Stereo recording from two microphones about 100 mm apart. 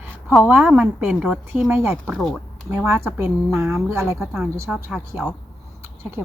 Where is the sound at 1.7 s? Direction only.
25° right (ahead or behind).